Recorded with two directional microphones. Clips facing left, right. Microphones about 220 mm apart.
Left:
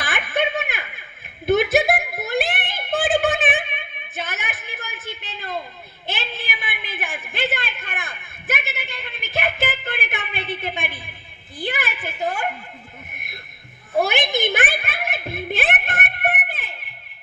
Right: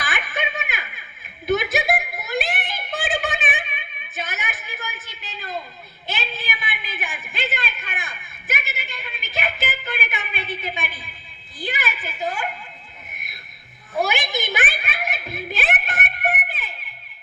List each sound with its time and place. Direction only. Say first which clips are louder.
0.1 s snicker: left 9 dB; 55° left (ahead or behind)
1.4 s a sound: left 4 dB; 55° left (ahead or behind)
13.9 s music: left 3 dB; 55° left (ahead or behind)